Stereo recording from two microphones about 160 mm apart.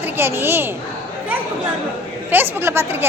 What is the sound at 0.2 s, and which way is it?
Speech, 15° right (ahead or behind).